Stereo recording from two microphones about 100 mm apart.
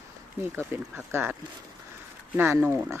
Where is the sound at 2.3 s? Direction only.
20° right (ahead or behind).